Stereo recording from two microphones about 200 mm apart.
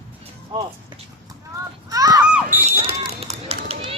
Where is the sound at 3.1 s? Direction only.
30° right (ahead or behind).